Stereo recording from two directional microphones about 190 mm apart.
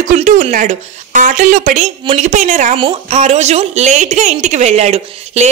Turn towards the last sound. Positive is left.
turn(degrees=-35)  # may be behind; listen again after turning